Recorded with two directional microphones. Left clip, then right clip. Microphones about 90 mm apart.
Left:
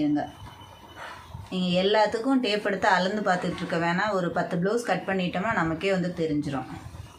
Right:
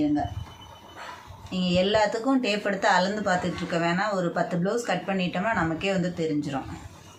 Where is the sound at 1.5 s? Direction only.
30° left (ahead or behind).